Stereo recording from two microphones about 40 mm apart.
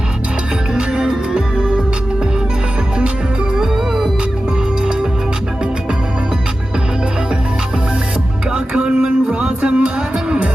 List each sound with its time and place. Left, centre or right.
0.7 s music: right
3.6 s music: centre
8.4 s music: right